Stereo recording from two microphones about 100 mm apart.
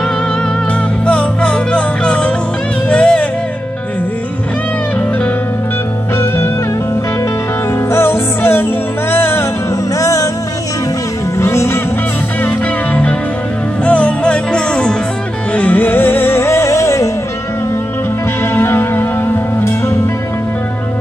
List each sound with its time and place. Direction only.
1.0 s music: 10° left (ahead or behind)
6.1 s music: 25° left (ahead or behind)
7.9 s music: 25° left (ahead or behind)
9.9 s music: 35° left (ahead or behind)
11.3 s music: 25° left (ahead or behind)
12.4 s music: 15° left (ahead or behind); by 17.1 s 30° left (ahead or behind)
18.4 s music: 25° left (ahead or behind)